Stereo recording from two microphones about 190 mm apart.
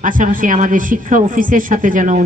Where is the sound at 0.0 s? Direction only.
45° right (ahead or behind).